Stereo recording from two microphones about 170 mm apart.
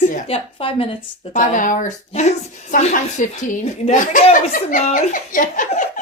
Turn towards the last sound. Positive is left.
turn(degrees=50)  # may be behind; listen again after turning